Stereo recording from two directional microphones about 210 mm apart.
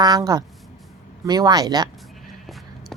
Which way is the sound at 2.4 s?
Centre (ahead or behind).